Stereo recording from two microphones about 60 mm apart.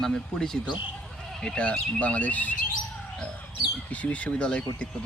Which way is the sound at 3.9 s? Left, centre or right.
Left.